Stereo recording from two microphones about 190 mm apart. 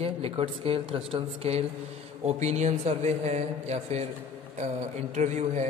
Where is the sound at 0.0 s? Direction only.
30° right (ahead or behind).